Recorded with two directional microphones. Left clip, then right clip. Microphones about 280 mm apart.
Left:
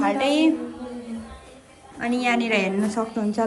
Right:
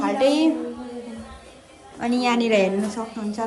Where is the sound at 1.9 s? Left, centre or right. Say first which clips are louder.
Right 1 dB; centre.